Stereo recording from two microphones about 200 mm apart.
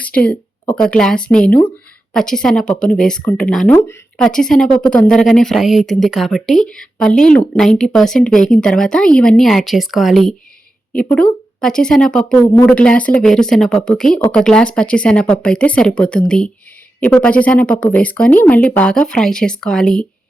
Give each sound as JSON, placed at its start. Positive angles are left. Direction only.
{"t": 0.8, "sound": "speech", "side_deg": 5}